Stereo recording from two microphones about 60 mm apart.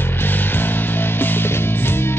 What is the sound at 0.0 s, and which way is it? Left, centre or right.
Music, left.